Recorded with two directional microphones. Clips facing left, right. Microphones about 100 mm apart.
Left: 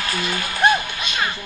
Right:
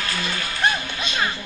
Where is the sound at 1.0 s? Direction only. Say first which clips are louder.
Even; 30° right (ahead or behind).